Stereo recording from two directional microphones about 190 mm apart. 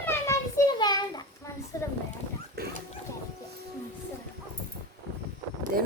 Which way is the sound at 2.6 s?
55° right (ahead or behind).